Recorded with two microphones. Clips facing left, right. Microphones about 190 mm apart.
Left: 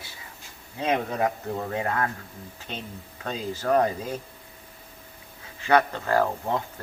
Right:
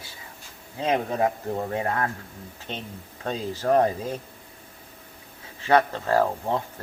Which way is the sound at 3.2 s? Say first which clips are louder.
Right 2 dB; 30° right (ahead or behind).